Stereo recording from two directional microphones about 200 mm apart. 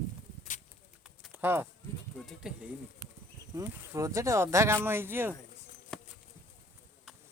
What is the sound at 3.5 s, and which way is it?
Speech, 15° right (ahead or behind).